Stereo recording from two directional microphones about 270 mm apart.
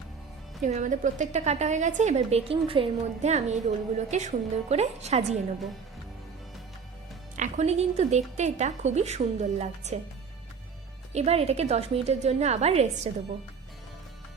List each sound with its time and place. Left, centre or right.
0.6 s a woman's voice: right
7.3 s a woman's voice: right
11.1 s a woman's voice: right